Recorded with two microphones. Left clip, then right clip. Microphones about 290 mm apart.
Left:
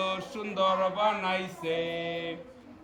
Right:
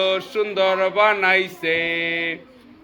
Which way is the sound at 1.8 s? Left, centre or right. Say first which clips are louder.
Right 10 dB; centre.